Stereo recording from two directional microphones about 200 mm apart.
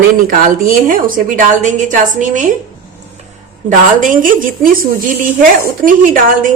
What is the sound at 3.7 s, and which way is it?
A woman's voice, 40° right (ahead or behind).